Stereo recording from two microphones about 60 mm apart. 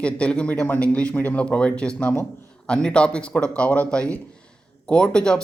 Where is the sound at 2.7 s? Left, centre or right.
Centre.